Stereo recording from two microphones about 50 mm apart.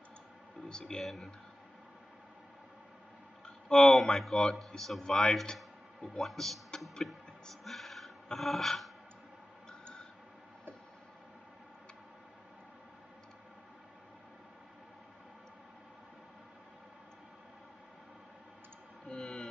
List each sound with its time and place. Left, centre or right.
0.7 s speech: centre
1.0 s speech: centre
3.4 s a sound: centre
3.9 s speech: centre
9.7 s tick-tock: centre
19.0 s a sound: centre